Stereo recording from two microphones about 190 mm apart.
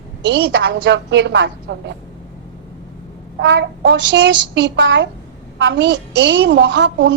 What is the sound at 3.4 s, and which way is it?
A woman's voice, 65° right (ahead or behind).